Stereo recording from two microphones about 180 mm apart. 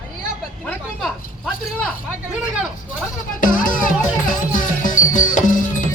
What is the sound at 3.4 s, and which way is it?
Music, 50° left (ahead or behind).